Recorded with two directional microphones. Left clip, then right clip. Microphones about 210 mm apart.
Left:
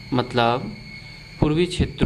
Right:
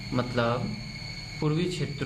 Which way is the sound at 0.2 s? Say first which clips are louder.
Left 7 dB; 45° left (ahead or behind).